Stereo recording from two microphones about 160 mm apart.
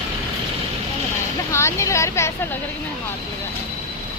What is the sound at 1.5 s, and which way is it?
Speech, 20° left (ahead or behind).